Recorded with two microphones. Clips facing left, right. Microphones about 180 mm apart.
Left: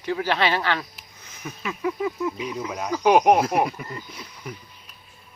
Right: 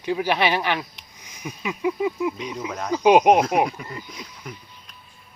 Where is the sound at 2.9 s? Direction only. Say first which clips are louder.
Right 2 dB; 20° right (ahead or behind).